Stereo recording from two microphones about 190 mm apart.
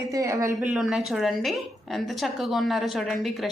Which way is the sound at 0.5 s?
5° right (ahead or behind).